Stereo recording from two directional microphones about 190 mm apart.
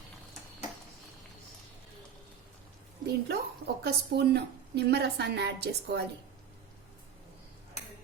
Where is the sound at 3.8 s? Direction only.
60° right (ahead or behind).